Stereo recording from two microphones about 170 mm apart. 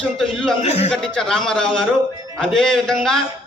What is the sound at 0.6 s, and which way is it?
Speech, 40° left (ahead or behind).